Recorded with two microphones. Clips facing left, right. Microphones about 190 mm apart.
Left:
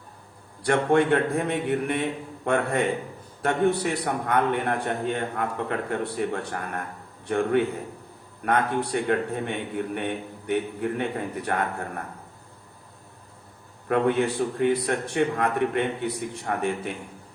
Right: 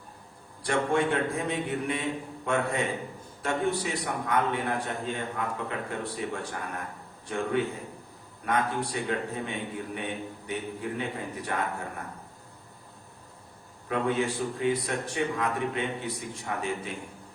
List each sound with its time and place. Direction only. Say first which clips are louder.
0.6 s a man's voice: left 5 dB; 60° left (ahead or behind)
13.8 s a man's voice: left 5 dB; 60° left (ahead or behind)